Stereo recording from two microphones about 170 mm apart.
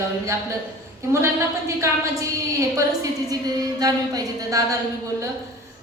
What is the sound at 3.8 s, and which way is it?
Speech, 20° right (ahead or behind).